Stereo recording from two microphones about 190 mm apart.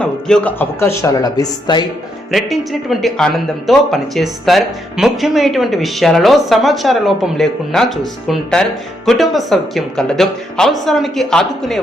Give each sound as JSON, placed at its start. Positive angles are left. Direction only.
{"t": 0.0, "sound": "speech", "side_deg": 5}
{"t": 2.3, "sound": "speech", "side_deg": 0}